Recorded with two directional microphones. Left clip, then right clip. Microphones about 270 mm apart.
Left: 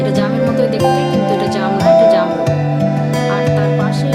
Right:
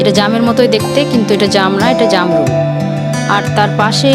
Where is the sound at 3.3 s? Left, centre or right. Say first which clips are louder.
Right 5 dB; right.